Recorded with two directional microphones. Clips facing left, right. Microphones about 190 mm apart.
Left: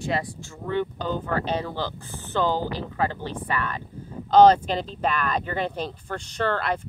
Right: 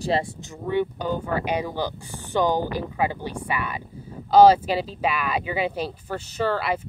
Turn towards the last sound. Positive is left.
turn(degrees=-5)  # may be behind; listen again after turning